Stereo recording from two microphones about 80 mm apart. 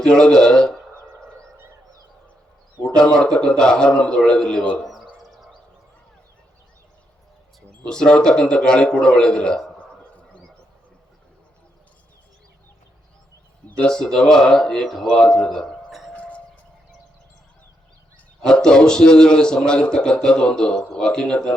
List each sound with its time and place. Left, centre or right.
0.0 s a man's voice: centre
2.8 s a man's voice: centre
5.3 s a sound: centre
7.9 s a man's voice: centre
13.7 s a man's voice: centre
16.1 s music: centre
18.4 s a man's voice: centre